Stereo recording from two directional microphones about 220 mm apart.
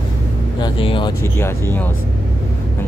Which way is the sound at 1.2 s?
10° left (ahead or behind).